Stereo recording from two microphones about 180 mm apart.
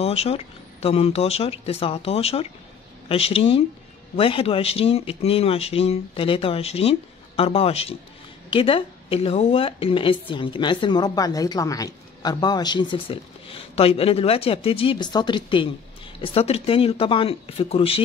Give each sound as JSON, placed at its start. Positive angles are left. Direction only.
{"t": 0.0, "sound": "speech", "side_deg": 35}